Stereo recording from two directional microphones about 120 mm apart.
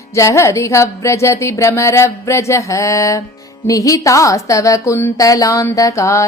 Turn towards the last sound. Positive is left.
turn(degrees=25)  # may be behind; listen again after turning